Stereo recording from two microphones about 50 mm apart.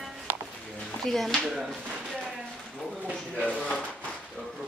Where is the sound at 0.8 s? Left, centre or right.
Centre.